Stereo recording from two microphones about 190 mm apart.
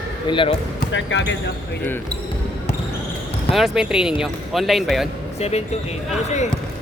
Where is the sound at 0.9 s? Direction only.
70° left (ahead or behind).